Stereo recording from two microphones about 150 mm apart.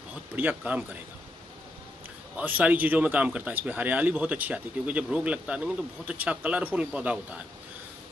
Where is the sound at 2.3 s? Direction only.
10° right (ahead or behind).